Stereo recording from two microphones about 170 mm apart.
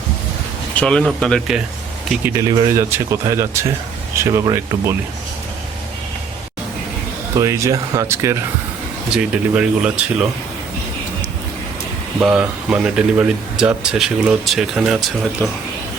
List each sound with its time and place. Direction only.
0.8 s speech: 5° left (ahead or behind)
2.2 s speech: 20° right (ahead or behind)
7.3 s speech: 15° right (ahead or behind)
9.0 s speech: 5° right (ahead or behind)
12.2 s speech: 5° right (ahead or behind)